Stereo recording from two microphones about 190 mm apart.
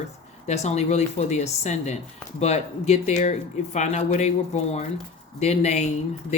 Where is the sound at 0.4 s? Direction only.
35° left (ahead or behind).